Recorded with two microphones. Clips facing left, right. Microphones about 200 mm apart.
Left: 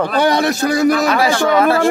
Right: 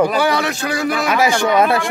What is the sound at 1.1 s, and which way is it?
Speech, 15° right (ahead or behind).